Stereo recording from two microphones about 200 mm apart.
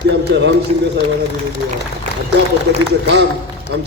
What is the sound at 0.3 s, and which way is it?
Speech, 60° right (ahead or behind).